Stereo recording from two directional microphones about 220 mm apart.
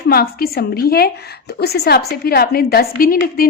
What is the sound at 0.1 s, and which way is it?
A woman's voice, 45° left (ahead or behind).